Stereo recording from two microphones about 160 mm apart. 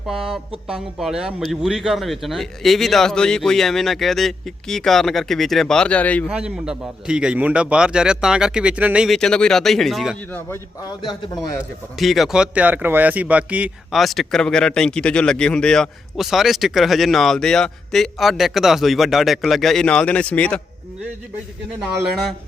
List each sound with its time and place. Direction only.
0.0 s speech: centre (ahead or behind)
6.2 s speech: 5° right (ahead or behind)
10.3 s a man's voice: 20° left (ahead or behind)
11.9 s speech: centre (ahead or behind)